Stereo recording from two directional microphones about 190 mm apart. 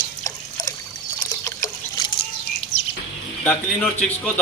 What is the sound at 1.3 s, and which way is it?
Trickle, 15° left (ahead or behind).